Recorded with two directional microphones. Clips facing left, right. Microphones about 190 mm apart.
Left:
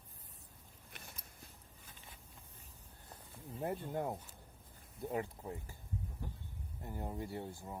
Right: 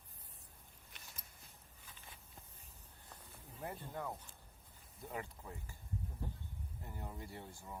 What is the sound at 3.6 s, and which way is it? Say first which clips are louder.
Speech: left 6 dB; 40° left (ahead or behind).